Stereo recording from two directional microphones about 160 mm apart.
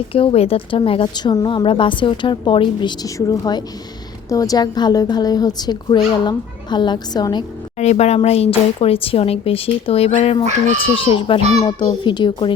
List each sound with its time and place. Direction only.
0.1 s a woman's voice: 35° left (ahead or behind)
7.8 s a woman's voice: 45° left (ahead or behind)
10.4 s speech: 45° right (ahead or behind)
11.0 s a woman's voice: 35° left (ahead or behind)